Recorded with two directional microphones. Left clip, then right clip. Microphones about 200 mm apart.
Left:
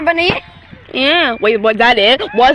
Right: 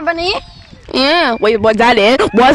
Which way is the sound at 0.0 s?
30° left (ahead or behind).